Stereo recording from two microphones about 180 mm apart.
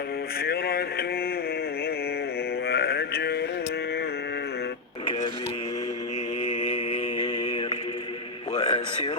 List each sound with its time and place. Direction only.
0.4 s speech: 60° left (ahead or behind)
2.6 s mantra: 60° left (ahead or behind)
6.4 s mantra: 40° left (ahead or behind)
8.6 s a sound: 35° left (ahead or behind)